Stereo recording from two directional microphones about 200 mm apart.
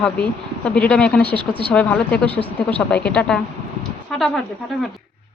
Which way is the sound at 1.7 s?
5° left (ahead or behind).